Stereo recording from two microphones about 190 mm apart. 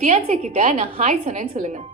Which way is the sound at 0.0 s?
40° right (ahead or behind).